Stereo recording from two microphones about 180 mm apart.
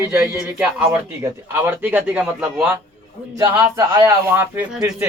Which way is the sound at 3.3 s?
20° right (ahead or behind).